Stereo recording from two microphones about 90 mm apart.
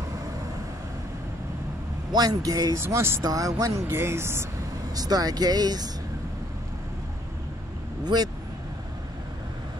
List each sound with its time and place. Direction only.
2.1 s speech: 45° right (ahead or behind)
2.8 s speech: 25° right (ahead or behind)
3.3 s speech: 40° right (ahead or behind)
4.9 s speech: 45° right (ahead or behind)
8.0 s speech: 50° right (ahead or behind)